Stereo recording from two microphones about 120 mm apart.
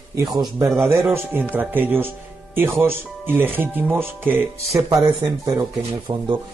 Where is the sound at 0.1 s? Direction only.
35° right (ahead or behind).